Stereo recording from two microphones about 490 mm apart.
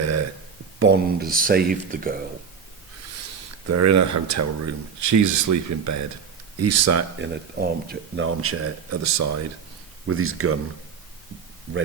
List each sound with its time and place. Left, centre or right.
0.0 s a sound: right
0.8 s speech: centre
3.7 s speech: right
7.5 s speech: centre